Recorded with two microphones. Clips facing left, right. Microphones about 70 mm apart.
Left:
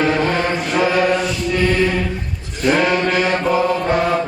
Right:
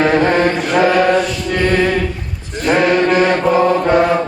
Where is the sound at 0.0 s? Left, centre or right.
Right.